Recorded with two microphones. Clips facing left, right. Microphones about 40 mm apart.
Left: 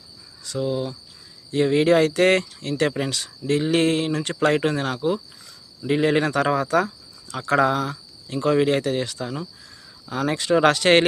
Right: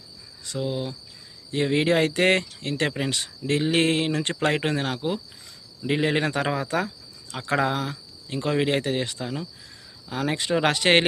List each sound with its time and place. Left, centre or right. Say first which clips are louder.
0.4 s speech: left 3 dB; right
6.7 s cricket: left 5 dB; right
7.5 s speech: left 4 dB; centre